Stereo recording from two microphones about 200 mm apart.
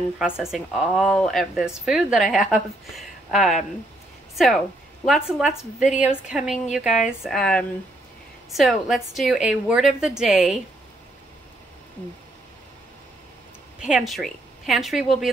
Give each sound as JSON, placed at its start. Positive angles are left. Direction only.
{"t": 0.2, "sound": "a woman's voice", "side_deg": 0}
{"t": 5.8, "sound": "a woman's voice", "side_deg": 40}
{"t": 6.3, "sound": "a woman's voice", "side_deg": 0}
{"t": 13.7, "sound": "a woman's voice", "side_deg": -5}